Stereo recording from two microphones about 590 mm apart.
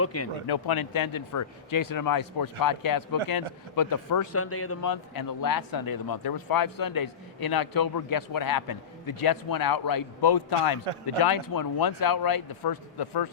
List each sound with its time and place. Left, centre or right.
0.0 s a man's voice: left
0.4 s a man's voice: left
4.9 s speech: left
10.9 s a man's voice: right
11.2 s speech: left